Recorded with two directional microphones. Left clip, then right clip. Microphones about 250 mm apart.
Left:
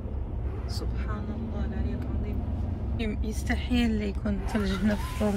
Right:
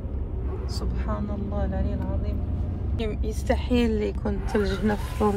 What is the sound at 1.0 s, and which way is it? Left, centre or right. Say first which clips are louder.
Speech: right 5 dB; centre.